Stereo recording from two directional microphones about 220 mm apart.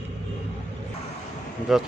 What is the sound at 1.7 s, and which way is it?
Speech, centre (ahead or behind).